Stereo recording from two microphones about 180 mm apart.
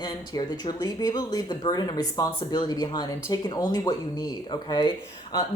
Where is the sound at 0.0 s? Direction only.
25° left (ahead or behind).